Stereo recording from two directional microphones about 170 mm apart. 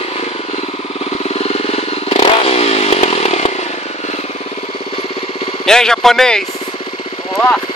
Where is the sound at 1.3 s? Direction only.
35° left (ahead or behind).